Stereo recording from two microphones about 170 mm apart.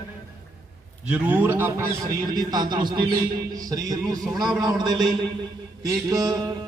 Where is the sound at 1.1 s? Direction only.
10° right (ahead or behind).